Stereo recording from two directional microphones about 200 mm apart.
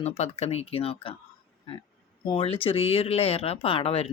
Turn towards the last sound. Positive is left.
turn(degrees=30)  # may be behind; listen again after turning